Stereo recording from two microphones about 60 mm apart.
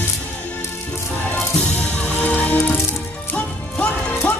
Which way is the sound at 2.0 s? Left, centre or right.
Left.